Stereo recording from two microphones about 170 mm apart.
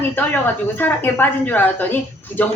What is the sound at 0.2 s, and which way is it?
A woman's voice, 10° left (ahead or behind).